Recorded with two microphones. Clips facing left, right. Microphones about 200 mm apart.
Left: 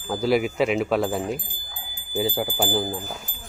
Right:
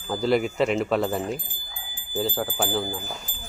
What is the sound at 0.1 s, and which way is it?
Speech, 5° left (ahead or behind).